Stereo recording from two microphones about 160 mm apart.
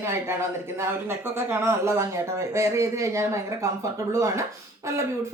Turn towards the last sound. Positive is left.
turn(degrees=-15)  # may be behind; listen again after turning